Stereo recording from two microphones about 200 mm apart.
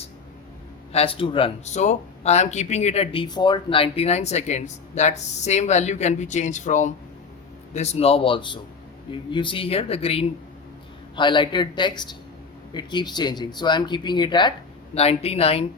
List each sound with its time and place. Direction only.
0.9 s speech: 30° left (ahead or behind)